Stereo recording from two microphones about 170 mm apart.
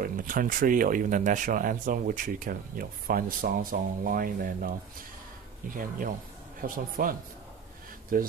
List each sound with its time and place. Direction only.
0.0 s speech: 55° right (ahead or behind)